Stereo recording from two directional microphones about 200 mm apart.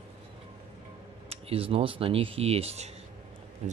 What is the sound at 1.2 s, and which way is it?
Speech, 30° right (ahead or behind).